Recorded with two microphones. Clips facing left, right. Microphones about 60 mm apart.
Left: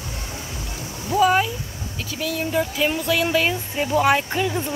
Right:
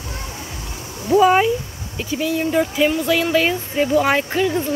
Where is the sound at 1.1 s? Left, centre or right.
Centre.